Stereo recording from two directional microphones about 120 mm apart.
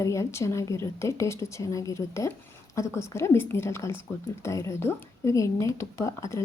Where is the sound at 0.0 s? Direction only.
25° left (ahead or behind).